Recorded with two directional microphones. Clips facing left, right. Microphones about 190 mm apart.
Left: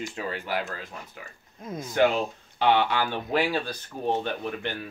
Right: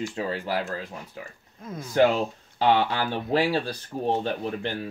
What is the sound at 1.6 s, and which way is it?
Speech, 15° left (ahead or behind).